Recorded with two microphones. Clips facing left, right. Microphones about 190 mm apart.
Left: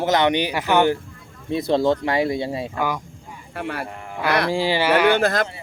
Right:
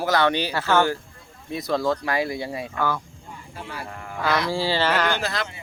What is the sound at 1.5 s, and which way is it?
Speech, 30° left (ahead or behind).